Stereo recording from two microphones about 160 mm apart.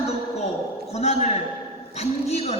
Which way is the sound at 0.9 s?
45° left (ahead or behind).